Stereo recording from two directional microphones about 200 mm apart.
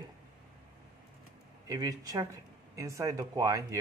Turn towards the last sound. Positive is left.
turn(degrees=-15)  # may be behind; listen again after turning